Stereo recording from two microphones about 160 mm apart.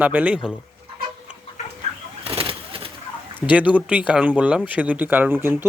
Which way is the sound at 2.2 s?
35° right (ahead or behind).